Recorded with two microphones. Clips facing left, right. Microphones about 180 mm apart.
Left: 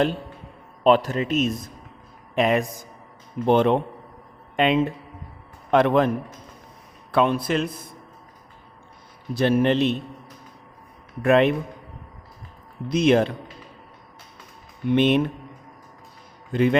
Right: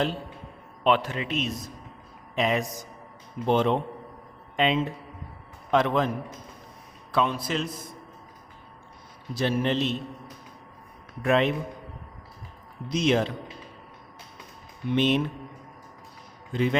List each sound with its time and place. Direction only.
0.9 s a man's voice: 40° left (ahead or behind); by 6.1 s 55° left (ahead or behind)
7.1 s a man's voice: 55° left (ahead or behind)
9.3 s a man's voice: 60° left (ahead or behind)
11.2 s a man's voice: 60° left (ahead or behind)
12.9 s a man's voice: 55° left (ahead or behind)
14.9 s a man's voice: 60° left (ahead or behind)
16.5 s a man's voice: 60° left (ahead or behind)